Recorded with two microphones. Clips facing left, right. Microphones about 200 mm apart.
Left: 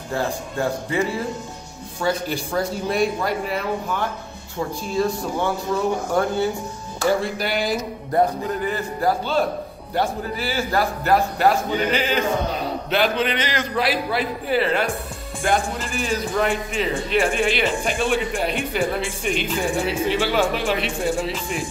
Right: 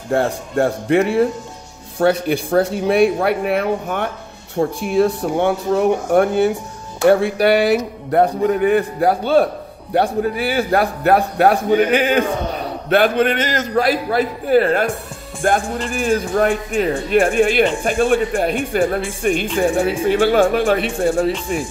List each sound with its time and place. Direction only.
0.1 s speech: 70° right (ahead or behind)
2.0 s a man's voice: 60° right (ahead or behind)